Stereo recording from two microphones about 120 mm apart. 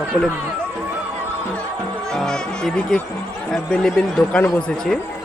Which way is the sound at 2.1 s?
5° left (ahead or behind).